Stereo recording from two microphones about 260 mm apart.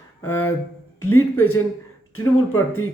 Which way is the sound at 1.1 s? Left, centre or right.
Left.